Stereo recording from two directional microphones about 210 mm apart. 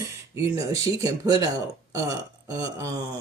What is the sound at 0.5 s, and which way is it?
Speech, 15° right (ahead or behind).